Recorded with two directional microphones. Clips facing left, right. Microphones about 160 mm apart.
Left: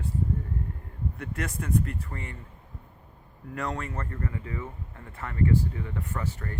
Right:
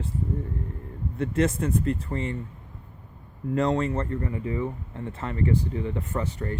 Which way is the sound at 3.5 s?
25° right (ahead or behind).